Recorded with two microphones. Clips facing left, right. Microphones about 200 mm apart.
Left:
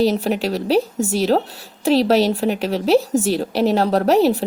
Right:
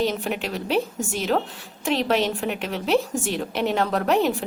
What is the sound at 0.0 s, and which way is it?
A woman's voice, 35° left (ahead or behind).